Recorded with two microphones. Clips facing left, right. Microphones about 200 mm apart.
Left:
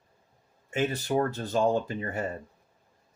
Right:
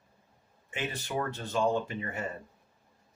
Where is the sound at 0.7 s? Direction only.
40° left (ahead or behind).